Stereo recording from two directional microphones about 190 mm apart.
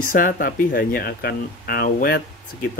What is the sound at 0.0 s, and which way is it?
Speech, 45° left (ahead or behind).